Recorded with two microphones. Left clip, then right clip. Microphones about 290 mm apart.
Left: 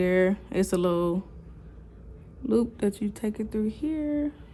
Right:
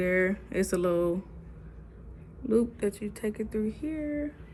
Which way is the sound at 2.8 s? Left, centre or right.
Left.